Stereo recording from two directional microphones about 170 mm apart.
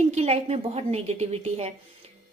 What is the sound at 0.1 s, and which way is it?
Speech, 40° right (ahead or behind).